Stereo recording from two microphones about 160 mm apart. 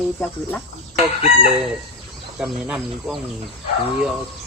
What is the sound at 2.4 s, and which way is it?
Speech, 10° right (ahead or behind).